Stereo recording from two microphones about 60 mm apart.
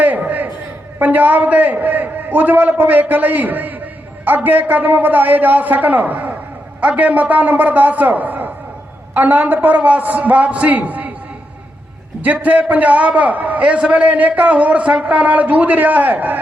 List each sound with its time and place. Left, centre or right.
0.0 s a sound: right
0.9 s a man's voice: right
12.2 s a man's voice: right